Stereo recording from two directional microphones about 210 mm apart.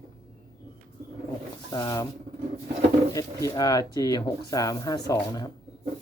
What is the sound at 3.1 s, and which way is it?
Speech, 15° left (ahead or behind).